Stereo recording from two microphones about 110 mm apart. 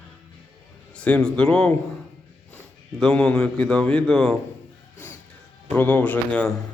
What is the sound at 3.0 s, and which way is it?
A man's voice, 5° left (ahead or behind).